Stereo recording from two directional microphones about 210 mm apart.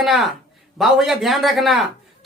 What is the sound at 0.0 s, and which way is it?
Speech, centre (ahead or behind).